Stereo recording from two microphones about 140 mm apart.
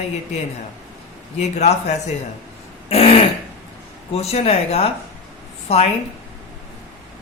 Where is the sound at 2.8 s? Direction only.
45° left (ahead or behind).